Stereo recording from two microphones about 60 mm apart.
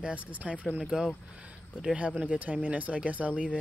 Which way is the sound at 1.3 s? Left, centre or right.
Centre.